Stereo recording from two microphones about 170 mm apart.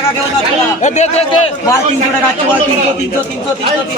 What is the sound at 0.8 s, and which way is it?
Speech, 40° left (ahead or behind).